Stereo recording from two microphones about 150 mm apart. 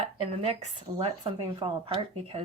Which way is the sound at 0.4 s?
40° right (ahead or behind).